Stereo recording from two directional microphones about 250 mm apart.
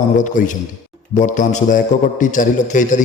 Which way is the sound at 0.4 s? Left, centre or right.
Left.